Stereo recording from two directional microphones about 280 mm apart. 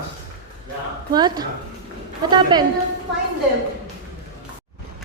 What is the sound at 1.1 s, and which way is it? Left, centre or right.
Speech, centre.